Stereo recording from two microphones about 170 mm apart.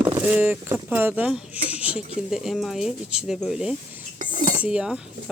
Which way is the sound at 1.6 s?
10° right (ahead or behind).